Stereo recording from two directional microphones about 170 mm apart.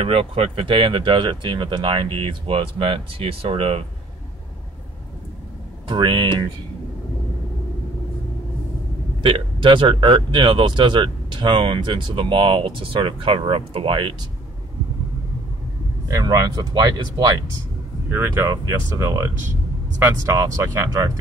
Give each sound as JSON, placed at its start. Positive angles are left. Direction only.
{"t": 0.0, "sound": "speech", "side_deg": -35}
{"t": 5.9, "sound": "speech", "side_deg": -30}
{"t": 9.2, "sound": "speech", "side_deg": -30}
{"t": 16.1, "sound": "speech", "side_deg": -20}